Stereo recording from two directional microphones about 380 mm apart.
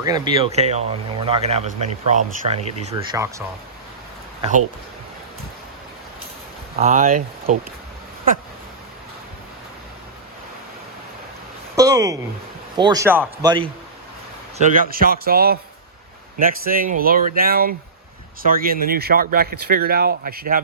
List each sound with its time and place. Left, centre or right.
0.0 s speech: centre
6.7 s speech: centre
11.8 s a sound: centre
12.7 s speech: centre
14.6 s speech: right